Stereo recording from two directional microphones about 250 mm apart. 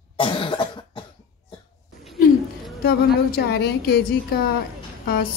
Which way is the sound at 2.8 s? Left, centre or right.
Left.